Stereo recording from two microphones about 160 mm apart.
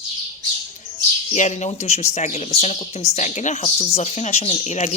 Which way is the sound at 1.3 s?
45° left (ahead or behind).